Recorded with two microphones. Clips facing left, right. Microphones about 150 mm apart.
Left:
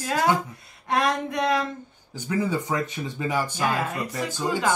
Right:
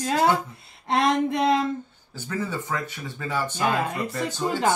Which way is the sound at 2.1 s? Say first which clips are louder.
Left 4 dB; 15° left (ahead or behind).